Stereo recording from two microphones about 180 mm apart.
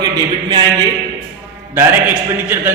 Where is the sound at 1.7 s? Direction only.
10° right (ahead or behind).